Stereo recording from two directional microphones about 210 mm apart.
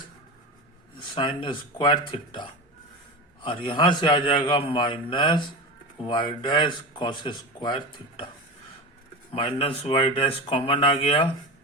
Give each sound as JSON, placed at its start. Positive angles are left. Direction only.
{"t": 1.1, "sound": "speech", "side_deg": 25}
{"t": 9.3, "sound": "speech", "side_deg": 25}